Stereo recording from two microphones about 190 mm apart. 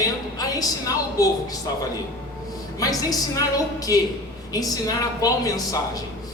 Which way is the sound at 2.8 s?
20° left (ahead or behind).